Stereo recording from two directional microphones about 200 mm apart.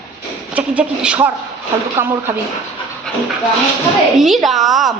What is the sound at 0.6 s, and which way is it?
Speech, 5° right (ahead or behind).